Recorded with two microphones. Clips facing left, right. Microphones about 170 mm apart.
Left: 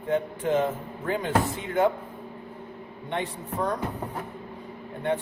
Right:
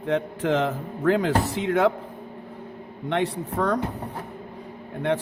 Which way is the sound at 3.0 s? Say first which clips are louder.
Right 6 dB; 75° right (ahead or behind).